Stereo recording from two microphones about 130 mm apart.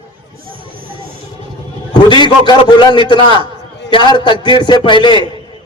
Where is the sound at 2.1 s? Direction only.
35° left (ahead or behind).